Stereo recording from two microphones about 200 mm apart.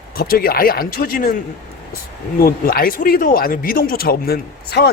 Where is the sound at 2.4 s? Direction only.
45° left (ahead or behind).